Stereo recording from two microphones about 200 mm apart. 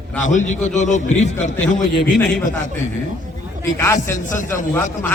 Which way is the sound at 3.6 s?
10° left (ahead or behind).